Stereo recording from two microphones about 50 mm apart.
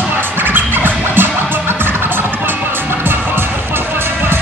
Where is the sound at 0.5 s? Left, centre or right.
Right.